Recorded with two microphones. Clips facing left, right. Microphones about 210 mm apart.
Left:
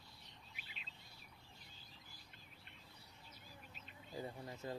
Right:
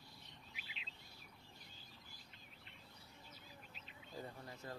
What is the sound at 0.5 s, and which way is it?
Bird, 45° left (ahead or behind).